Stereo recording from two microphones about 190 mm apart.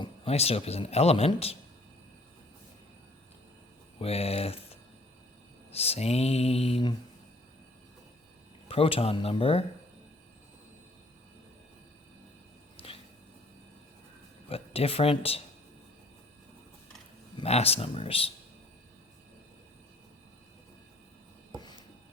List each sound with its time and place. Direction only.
0.0 s a man's voice: 35° left (ahead or behind)
4.0 s a man's voice: 30° left (ahead or behind)
8.6 s a man's voice: 30° left (ahead or behind)
12.7 s a sound: 30° left (ahead or behind)
14.5 s a man's voice: 30° left (ahead or behind)
17.3 s a man's voice: 30° left (ahead or behind)
21.6 s a sound: 20° left (ahead or behind)